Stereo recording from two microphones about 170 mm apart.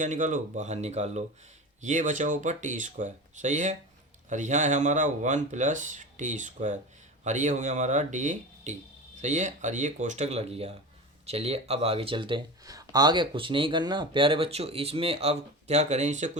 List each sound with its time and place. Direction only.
0.0 s speech: 50° right (ahead or behind)